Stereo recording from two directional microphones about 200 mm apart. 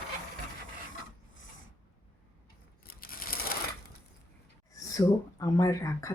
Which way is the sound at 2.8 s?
45° left (ahead or behind).